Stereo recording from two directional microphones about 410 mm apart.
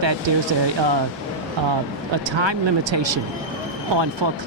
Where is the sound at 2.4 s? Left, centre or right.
Right.